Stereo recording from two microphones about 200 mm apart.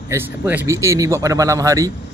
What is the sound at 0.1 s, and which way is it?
Speech, 15° right (ahead or behind).